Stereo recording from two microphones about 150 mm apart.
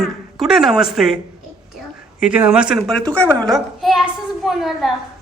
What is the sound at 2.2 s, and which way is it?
A woman's voice, 10° right (ahead or behind).